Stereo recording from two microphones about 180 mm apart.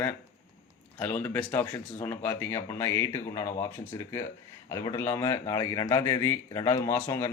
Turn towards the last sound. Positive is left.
turn(degrees=15)  # may be behind; listen again after turning